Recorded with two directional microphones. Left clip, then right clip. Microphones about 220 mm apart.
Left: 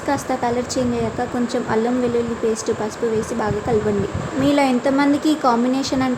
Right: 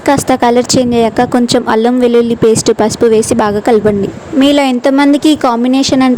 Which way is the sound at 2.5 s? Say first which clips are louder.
Right 12 dB; 45° right (ahead or behind).